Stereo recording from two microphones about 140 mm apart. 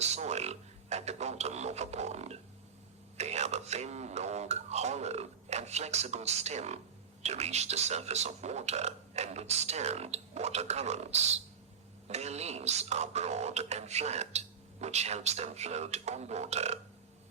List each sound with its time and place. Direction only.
0.0 s speech: 50° right (ahead or behind)